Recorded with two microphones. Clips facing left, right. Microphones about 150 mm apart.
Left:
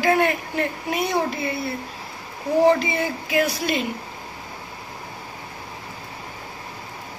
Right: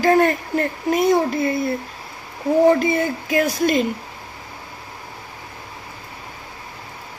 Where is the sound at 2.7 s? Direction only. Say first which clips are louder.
Right 3 dB; 45° right (ahead or behind).